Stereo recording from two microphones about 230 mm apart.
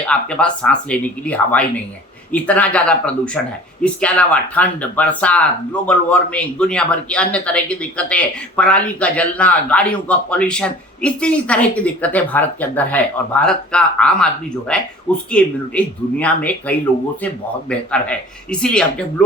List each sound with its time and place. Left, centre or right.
0.1 s speech: centre